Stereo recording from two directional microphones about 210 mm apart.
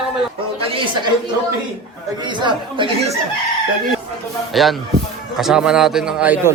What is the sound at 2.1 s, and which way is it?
Speech, 20° right (ahead or behind).